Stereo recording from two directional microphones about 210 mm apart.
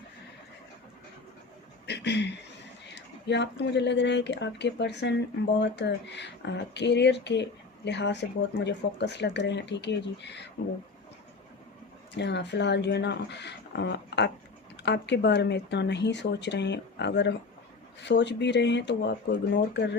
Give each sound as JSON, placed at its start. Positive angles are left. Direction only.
{"t": 1.9, "sound": "a sound", "side_deg": 55}
{"t": 2.9, "sound": "speech", "side_deg": 55}
{"t": 12.1, "sound": "speech", "side_deg": 55}